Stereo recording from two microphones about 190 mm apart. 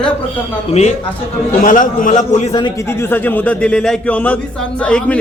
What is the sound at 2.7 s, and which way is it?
Speech, 15° left (ahead or behind).